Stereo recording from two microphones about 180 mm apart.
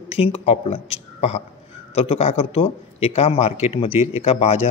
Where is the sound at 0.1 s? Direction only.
30° left (ahead or behind).